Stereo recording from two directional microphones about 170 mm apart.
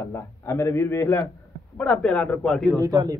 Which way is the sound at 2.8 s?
20° right (ahead or behind).